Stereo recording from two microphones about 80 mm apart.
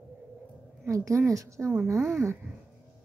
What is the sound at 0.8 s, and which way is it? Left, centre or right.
A woman's voice, right.